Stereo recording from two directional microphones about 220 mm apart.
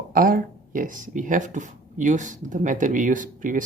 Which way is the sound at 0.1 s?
40° right (ahead or behind).